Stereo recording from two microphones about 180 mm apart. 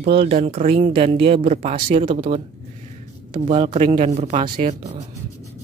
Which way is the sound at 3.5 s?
35° right (ahead or behind).